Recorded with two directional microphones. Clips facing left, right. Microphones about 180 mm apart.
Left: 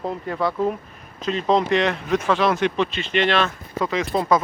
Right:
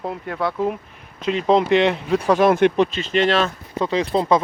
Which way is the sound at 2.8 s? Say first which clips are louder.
Right 3 dB; 40° right (ahead or behind).